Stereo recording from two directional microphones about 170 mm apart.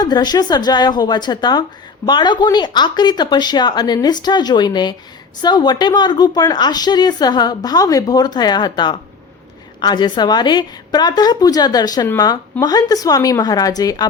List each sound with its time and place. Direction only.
0.0 s a woman's voice: 25° left (ahead or behind)